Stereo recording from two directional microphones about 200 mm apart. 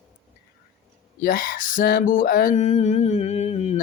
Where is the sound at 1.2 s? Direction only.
45° left (ahead or behind).